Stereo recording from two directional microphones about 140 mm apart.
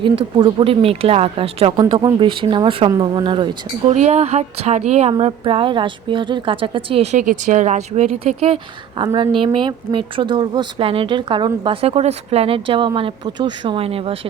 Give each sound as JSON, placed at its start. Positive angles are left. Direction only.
{"t": 0.0, "sound": "speech", "side_deg": -35}
{"t": 1.8, "sound": "speech", "side_deg": -30}
{"t": 3.8, "sound": "speech", "side_deg": -55}
{"t": 7.2, "sound": "speech", "side_deg": -65}